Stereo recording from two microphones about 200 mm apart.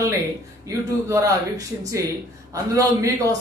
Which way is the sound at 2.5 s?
15° right (ahead or behind).